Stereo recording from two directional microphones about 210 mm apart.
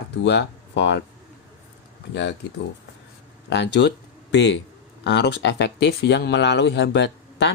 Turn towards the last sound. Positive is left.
turn(degrees=55)  # may be behind; listen again after turning